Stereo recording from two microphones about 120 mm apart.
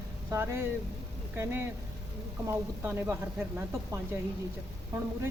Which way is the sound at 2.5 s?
20° right (ahead or behind).